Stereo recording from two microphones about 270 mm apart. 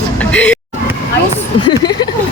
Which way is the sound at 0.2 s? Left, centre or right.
Centre.